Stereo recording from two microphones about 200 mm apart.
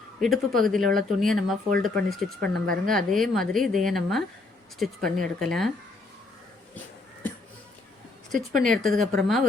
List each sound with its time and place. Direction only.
0.2 s speech: centre (ahead or behind)
8.3 s speech: centre (ahead or behind)
8.8 s speech: 40° right (ahead or behind)
9.1 s speech: centre (ahead or behind)